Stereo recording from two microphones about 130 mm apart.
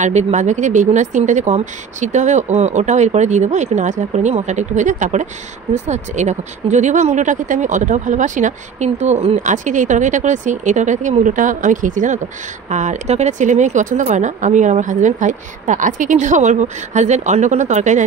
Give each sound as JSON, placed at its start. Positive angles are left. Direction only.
{"t": 0.0, "sound": "speech", "side_deg": -65}
{"t": 12.6, "sound": "speech", "side_deg": -65}